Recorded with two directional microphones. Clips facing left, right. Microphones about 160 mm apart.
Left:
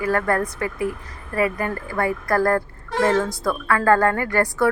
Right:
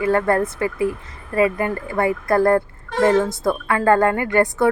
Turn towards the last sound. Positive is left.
turn(degrees=-20)  # may be behind; listen again after turning